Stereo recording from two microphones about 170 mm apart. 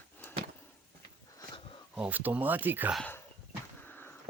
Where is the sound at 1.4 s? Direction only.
30° left (ahead or behind).